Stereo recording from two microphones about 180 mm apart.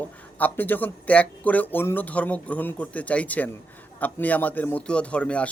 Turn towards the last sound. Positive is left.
turn(degrees=5)  # may be behind; listen again after turning